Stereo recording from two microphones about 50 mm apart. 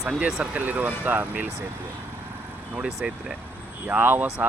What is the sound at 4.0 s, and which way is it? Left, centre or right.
Speech, right.